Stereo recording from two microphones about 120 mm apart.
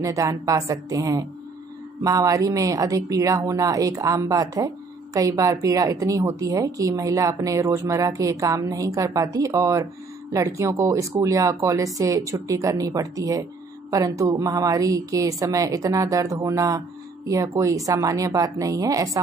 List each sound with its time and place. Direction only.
0.0 s speech: 25° right (ahead or behind)